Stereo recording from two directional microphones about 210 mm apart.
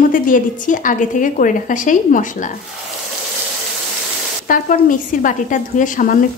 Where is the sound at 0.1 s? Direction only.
40° left (ahead or behind).